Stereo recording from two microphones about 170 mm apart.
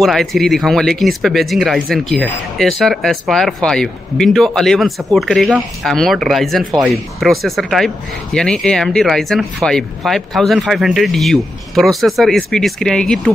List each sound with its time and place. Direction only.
0.0 s speech: centre (ahead or behind)